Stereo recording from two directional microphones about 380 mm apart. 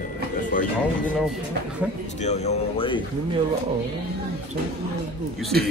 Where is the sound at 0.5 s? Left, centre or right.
Left.